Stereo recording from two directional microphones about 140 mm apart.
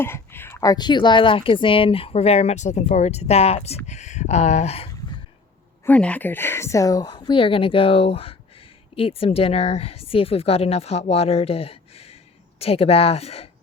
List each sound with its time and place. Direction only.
0.0 s speech: 15° left (ahead or behind); by 4.9 s 50° left (ahead or behind)
5.8 s a woman's voice: 10° left (ahead or behind); by 13.5 s 45° left (ahead or behind)